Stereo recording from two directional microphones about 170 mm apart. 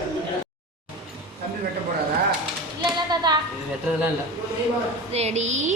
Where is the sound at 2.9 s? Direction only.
25° right (ahead or behind).